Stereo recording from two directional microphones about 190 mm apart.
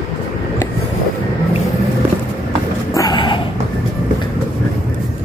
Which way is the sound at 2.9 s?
25° left (ahead or behind).